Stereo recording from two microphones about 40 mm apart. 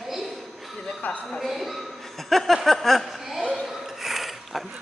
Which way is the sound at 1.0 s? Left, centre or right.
Left.